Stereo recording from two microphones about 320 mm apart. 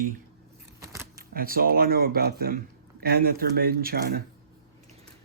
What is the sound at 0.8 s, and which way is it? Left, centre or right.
Keys jangling, centre.